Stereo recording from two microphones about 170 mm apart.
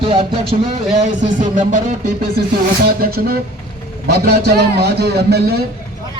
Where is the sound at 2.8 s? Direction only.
65° right (ahead or behind).